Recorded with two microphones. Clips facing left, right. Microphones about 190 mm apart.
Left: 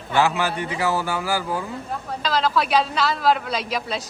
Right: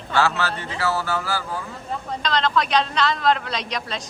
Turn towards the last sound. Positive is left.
turn(degrees=5)  # may be behind; listen again after turning